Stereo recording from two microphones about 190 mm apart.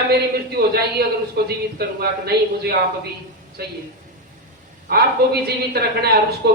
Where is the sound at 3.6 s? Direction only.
55° right (ahead or behind).